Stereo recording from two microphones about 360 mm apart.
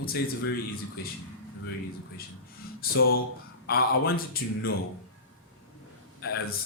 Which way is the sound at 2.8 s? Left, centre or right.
Left.